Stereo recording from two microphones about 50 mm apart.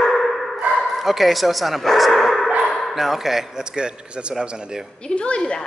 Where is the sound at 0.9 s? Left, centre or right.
Centre.